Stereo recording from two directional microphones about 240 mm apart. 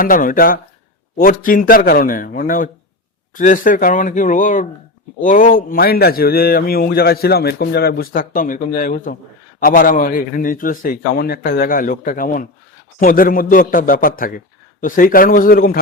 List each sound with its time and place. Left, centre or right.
0.0 s speech: left